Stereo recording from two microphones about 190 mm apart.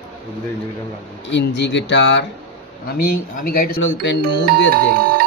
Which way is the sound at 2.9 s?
55° left (ahead or behind).